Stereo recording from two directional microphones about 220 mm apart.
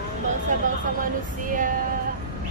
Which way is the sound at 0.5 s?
35° right (ahead or behind).